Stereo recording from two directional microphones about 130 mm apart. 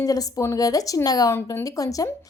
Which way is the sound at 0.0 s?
25° left (ahead or behind).